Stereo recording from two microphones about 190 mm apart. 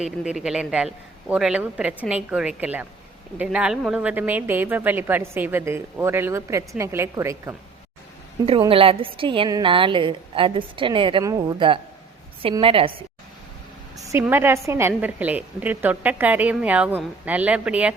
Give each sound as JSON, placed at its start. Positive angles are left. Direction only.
{"t": 0.0, "sound": "a woman's voice", "side_deg": -5}
{"t": 8.4, "sound": "a woman's voice", "side_deg": -30}
{"t": 13.9, "sound": "speech", "side_deg": -15}